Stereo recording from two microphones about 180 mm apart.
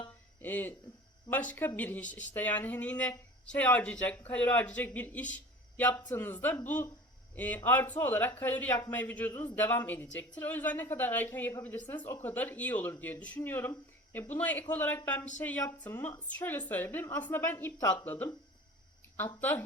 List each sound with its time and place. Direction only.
0.4 s speech: 10° left (ahead or behind)
5.3 s a sound: 10° left (ahead or behind)
5.9 s speech: 25° left (ahead or behind)
6.1 s speech: 10° left (ahead or behind)